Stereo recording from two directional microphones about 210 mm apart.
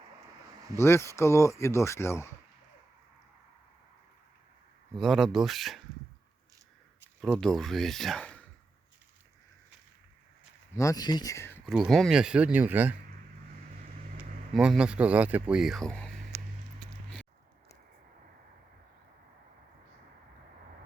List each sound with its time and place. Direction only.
0.8 s speech: 10° left (ahead or behind)
4.9 s speech: centre (ahead or behind)
7.2 s speech: 5° left (ahead or behind)
10.8 s speech: 15° left (ahead or behind)
11.6 s speech: centre (ahead or behind)
14.2 s speech: 5° right (ahead or behind)